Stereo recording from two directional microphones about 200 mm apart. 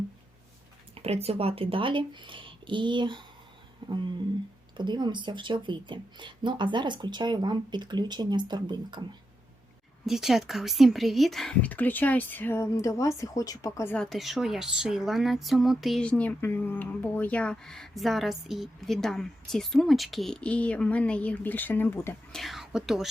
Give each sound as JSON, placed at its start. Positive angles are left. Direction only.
{"t": 0.9, "sound": "speech", "side_deg": -30}
{"t": 3.8, "sound": "a sound", "side_deg": -25}
{"t": 4.8, "sound": "speech", "side_deg": -20}
{"t": 10.1, "sound": "speech", "side_deg": 0}